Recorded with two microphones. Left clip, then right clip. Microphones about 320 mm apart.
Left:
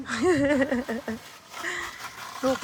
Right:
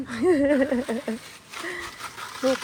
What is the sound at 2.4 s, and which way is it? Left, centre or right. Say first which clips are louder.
Speech: right 2 dB; centre.